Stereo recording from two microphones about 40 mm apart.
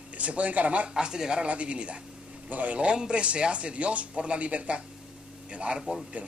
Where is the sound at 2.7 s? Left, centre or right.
Right.